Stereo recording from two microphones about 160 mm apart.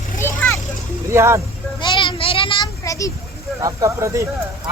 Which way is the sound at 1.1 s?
15° right (ahead or behind).